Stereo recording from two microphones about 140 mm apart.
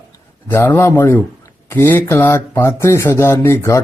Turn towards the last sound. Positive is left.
turn(degrees=15)  # may be behind; listen again after turning